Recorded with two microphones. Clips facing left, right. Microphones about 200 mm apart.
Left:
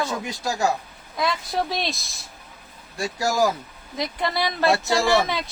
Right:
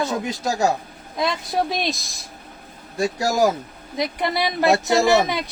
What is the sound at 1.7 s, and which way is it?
A man's voice, 15° right (ahead or behind).